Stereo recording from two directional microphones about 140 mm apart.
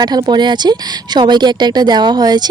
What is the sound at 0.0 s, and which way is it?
Speech, 30° right (ahead or behind).